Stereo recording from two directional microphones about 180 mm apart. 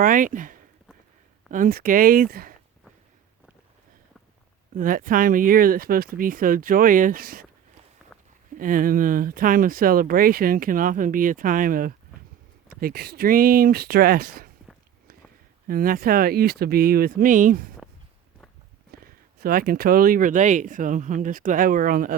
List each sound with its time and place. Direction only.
0.0 s speech: 50° right (ahead or behind)
4.8 s speech: 50° right (ahead or behind)
8.5 s speech: 50° right (ahead or behind)
15.6 s speech: 55° right (ahead or behind)
18.9 s speech: 55° right (ahead or behind)